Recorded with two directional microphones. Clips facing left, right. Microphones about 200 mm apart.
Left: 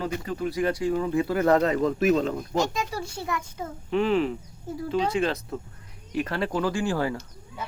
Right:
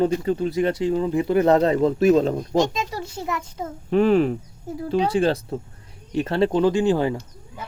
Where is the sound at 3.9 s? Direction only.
45° right (ahead or behind).